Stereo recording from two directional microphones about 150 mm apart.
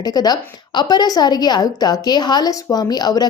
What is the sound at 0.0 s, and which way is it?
A woman's voice, 25° left (ahead or behind).